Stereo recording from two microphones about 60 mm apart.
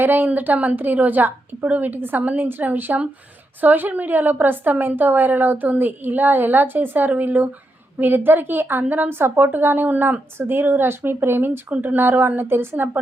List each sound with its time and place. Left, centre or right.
0.0 s a woman's voice: right